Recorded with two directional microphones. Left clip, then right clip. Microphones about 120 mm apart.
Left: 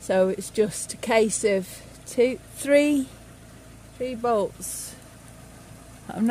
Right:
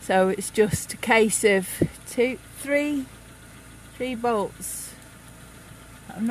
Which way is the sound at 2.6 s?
15° left (ahead or behind).